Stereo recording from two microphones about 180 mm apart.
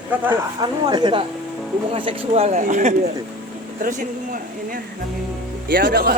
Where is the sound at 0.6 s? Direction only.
25° right (ahead or behind); by 4.4 s 50° right (ahead or behind).